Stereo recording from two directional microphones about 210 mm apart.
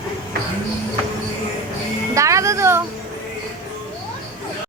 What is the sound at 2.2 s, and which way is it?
Music, 15° right (ahead or behind).